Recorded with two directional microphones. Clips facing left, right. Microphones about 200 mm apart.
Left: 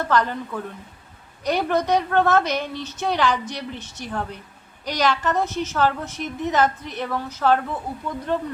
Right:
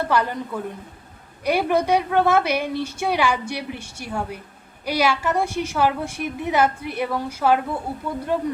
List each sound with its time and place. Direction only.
0.1 s a woman's voice: 10° right (ahead or behind)